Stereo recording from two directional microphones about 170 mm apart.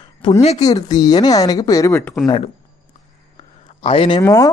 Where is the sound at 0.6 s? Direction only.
25° left (ahead or behind).